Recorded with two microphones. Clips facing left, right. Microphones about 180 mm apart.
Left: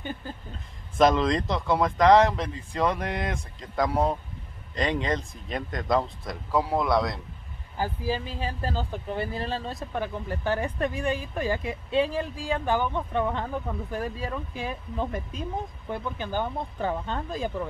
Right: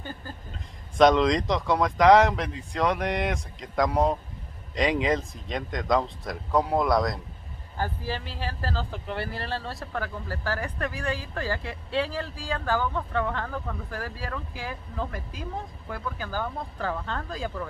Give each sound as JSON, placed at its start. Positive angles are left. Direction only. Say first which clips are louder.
{"t": 0.0, "sound": "speech", "louder": "left 3 dB", "side_deg": 20}
{"t": 0.9, "sound": "speech", "louder": "right 2 dB", "side_deg": 5}
{"t": 7.7, "sound": "speech", "louder": "left 3 dB", "side_deg": 15}